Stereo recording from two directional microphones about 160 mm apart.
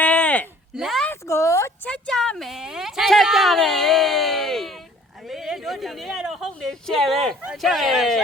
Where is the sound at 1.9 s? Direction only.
5° left (ahead or behind).